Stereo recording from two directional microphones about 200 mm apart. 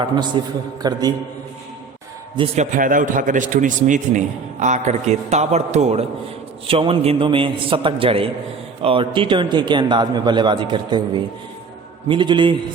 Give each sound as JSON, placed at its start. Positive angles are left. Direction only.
{"t": 0.4, "sound": "a man's voice", "side_deg": -25}
{"t": 2.3, "sound": "a man's voice", "side_deg": -25}
{"t": 2.7, "sound": "a man's voice", "side_deg": -40}